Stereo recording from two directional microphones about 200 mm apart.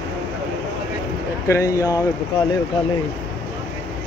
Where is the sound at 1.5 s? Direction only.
15° left (ahead or behind).